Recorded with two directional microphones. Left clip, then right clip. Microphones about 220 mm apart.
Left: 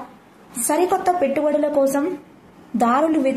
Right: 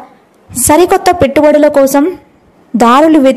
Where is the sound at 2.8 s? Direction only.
45° right (ahead or behind).